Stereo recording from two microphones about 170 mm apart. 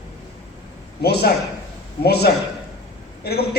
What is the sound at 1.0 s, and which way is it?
A man's voice, 70° left (ahead or behind).